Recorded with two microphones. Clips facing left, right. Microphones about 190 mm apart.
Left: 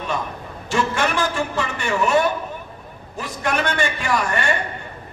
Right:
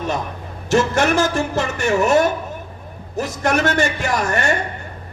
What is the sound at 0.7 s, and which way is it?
A man's voice, 40° right (ahead or behind).